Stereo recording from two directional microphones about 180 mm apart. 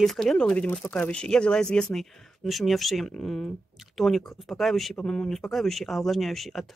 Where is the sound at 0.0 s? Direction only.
Centre (ahead or behind).